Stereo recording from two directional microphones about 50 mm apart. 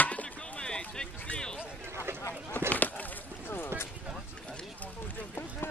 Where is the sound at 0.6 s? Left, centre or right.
Centre.